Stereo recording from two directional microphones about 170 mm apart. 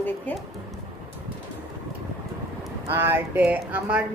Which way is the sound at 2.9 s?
15° right (ahead or behind).